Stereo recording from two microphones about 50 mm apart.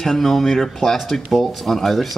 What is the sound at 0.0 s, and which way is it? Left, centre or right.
Speech, centre.